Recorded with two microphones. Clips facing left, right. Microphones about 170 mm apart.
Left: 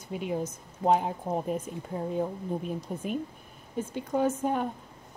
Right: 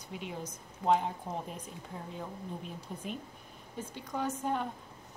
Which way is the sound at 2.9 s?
55° left (ahead or behind).